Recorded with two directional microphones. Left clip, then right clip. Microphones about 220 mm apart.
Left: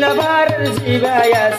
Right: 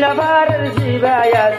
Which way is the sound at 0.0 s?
35° left (ahead or behind).